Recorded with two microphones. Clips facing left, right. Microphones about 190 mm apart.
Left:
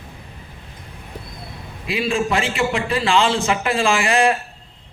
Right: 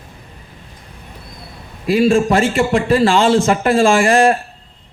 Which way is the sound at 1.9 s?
45° right (ahead or behind).